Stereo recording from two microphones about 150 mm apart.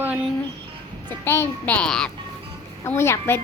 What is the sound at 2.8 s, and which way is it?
Speech, 15° left (ahead or behind).